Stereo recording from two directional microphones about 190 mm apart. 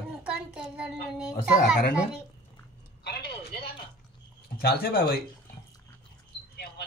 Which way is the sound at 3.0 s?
55° left (ahead or behind).